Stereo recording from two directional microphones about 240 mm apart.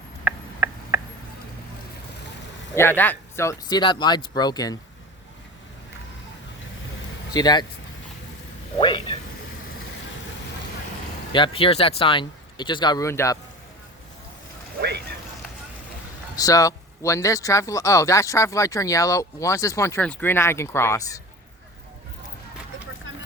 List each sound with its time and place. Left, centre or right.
0.3 s a sound: centre
2.7 s speech: centre
7.3 s speech: centre
8.8 s speech: left
11.3 s speech: centre
14.8 s vehicle: right
16.3 s speech: centre